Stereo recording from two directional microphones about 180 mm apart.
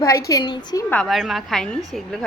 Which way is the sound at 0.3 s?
20° left (ahead or behind).